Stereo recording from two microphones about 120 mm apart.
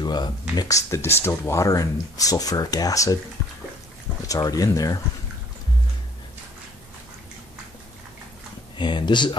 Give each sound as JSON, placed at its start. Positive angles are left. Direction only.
{"t": 0.0, "sound": "speech", "side_deg": 35}
{"t": 4.3, "sound": "speech", "side_deg": 30}
{"t": 8.7, "sound": "speech", "side_deg": 40}